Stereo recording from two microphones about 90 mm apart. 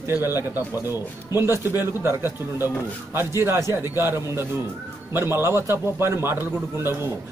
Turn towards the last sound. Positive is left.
turn(degrees=-30)  # may be behind; listen again after turning